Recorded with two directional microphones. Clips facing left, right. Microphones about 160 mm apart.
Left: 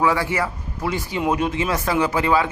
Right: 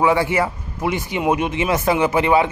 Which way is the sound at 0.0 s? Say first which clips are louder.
Right 3 dB; 25° right (ahead or behind).